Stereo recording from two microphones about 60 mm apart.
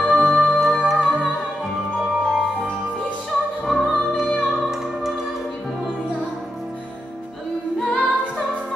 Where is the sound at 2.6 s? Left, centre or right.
Centre.